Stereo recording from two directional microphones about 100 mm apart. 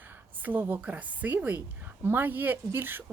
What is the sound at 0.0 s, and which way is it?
A woman's voice, 20° right (ahead or behind).